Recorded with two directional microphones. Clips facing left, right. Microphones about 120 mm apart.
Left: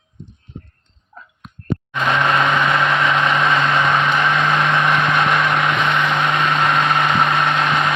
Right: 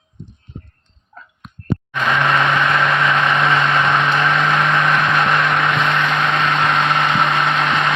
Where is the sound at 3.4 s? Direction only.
5° right (ahead or behind).